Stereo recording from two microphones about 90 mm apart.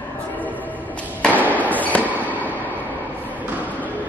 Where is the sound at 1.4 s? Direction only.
20° left (ahead or behind).